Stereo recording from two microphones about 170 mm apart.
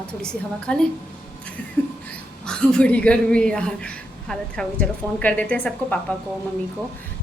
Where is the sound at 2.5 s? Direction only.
5° left (ahead or behind).